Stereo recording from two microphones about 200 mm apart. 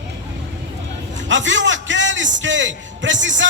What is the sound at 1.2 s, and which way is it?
A man's voice, 70° right (ahead or behind).